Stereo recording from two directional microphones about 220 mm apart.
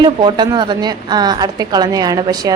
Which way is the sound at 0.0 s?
20° right (ahead or behind).